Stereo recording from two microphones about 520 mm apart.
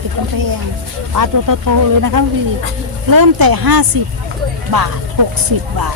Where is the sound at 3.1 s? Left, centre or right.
Right.